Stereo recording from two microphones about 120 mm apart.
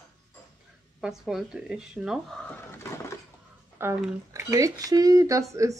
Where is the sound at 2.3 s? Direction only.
5° left (ahead or behind).